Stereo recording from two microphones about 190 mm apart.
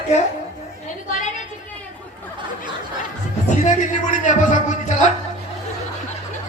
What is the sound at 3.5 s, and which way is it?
Speech, 40° left (ahead or behind).